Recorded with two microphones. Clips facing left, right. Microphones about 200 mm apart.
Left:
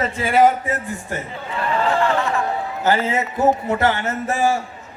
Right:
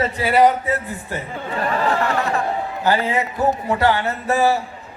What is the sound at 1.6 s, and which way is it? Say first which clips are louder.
Speech: left 1 dB; 40° right (ahead or behind).